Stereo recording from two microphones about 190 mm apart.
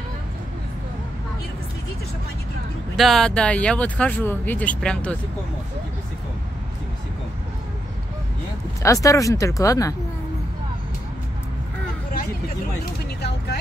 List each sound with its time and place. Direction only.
3.0 s speech: centre (ahead or behind)
8.8 s speech: 15° left (ahead or behind)